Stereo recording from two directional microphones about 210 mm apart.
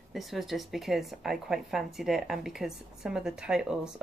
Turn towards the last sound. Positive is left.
turn(degrees=-5)  # may be behind; listen again after turning